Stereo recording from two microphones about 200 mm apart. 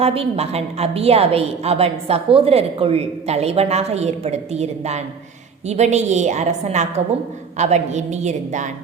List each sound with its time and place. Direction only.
0.0 s a woman's voice: 30° right (ahead or behind)